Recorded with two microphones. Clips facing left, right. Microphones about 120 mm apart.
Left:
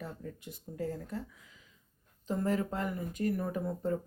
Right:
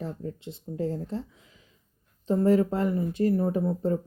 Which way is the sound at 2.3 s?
30° right (ahead or behind).